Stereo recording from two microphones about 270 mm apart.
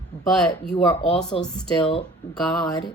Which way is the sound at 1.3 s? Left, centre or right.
Centre.